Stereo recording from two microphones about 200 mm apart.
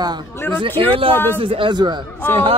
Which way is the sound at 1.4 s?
25° right (ahead or behind).